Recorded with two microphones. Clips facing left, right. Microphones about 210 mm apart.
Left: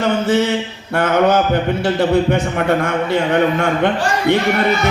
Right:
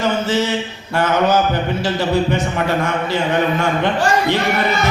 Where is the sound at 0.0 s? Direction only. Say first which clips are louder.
Left 3 dB; 55° left (ahead or behind).